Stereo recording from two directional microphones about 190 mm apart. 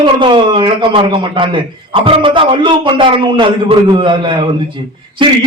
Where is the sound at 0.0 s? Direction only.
25° right (ahead or behind).